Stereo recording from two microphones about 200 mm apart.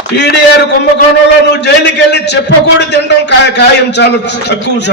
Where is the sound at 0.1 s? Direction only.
55° left (ahead or behind).